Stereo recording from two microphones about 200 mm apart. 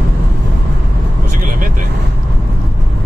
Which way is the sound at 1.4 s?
45° right (ahead or behind).